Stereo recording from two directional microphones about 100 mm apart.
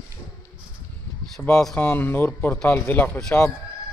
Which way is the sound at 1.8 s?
20° left (ahead or behind).